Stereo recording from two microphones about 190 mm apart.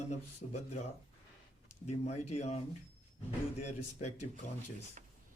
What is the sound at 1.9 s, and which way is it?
Speech, 35° left (ahead or behind).